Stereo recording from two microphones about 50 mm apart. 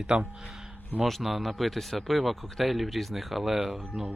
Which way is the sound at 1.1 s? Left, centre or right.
Centre.